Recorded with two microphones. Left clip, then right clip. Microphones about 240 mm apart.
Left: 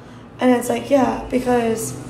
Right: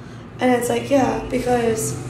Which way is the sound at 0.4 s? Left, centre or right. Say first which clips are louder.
Left 1 dB; centre.